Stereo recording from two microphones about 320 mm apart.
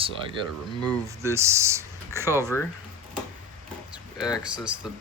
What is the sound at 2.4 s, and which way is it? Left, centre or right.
Speech, centre.